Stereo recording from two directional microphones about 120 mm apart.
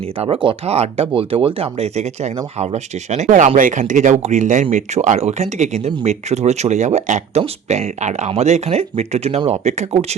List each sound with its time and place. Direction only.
0.4 s speech: 60° right (ahead or behind); by 4.6 s 85° right
4.7 s speech: 75° right (ahead or behind)